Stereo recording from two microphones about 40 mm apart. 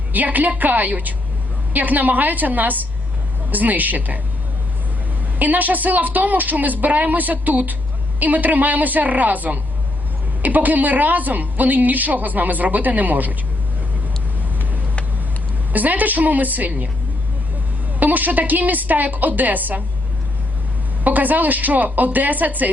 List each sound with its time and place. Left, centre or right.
0.1 s a woman's voice: right
5.4 s a woman's voice: right
15.7 s a woman's voice: right
18.0 s a woman's voice: right
21.0 s a woman's voice: right